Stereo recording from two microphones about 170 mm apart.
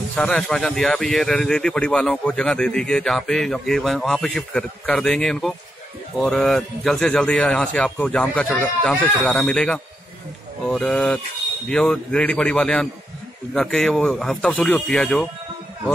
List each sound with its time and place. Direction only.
0.1 s speech: 5° left (ahead or behind)